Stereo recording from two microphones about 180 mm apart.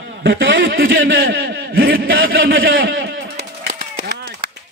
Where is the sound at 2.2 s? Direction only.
55° right (ahead or behind).